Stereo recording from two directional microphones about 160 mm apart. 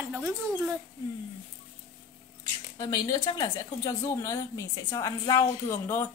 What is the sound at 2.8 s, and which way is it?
Speech, 25° left (ahead or behind).